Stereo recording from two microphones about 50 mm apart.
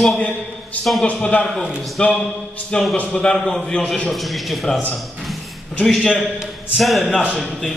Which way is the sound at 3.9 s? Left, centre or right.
Centre.